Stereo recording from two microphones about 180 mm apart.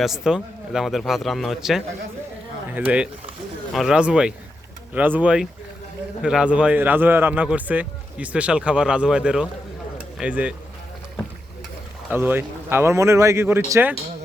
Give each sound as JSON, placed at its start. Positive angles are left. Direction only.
{"t": 0.0, "sound": "a man's voice", "side_deg": -5}
{"t": 12.1, "sound": "a man's voice", "side_deg": -10}